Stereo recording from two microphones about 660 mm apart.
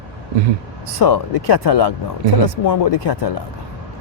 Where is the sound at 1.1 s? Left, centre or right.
Left.